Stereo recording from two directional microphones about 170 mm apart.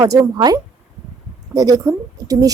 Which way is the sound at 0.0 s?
20° right (ahead or behind).